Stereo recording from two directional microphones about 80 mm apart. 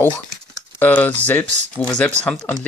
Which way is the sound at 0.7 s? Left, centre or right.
Left.